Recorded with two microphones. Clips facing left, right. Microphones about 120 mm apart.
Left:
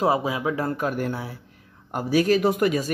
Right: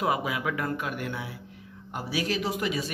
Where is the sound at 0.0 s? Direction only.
30° left (ahead or behind).